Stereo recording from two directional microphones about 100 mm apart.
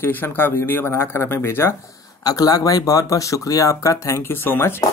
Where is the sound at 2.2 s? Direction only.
35° left (ahead or behind).